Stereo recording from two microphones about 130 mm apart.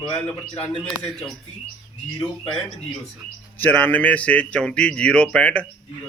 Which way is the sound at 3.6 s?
10° left (ahead or behind).